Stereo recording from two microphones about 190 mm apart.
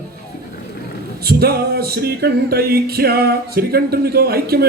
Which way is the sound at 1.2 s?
55° right (ahead or behind).